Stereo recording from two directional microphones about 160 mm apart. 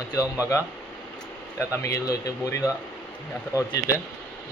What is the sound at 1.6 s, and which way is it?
Speech, 20° left (ahead or behind).